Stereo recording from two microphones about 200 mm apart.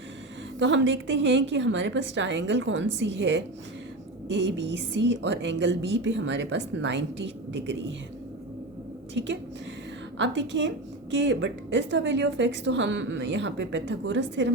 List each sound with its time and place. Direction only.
0.6 s a woman's voice: 65° right (ahead or behind)
9.1 s a woman's voice: 65° right (ahead or behind)